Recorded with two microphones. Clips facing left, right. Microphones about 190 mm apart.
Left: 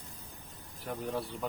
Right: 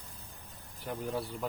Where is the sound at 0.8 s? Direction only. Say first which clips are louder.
Even; centre (ahead or behind).